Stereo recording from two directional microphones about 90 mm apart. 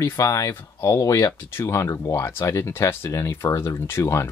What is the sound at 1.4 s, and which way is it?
Speech, 30° left (ahead or behind).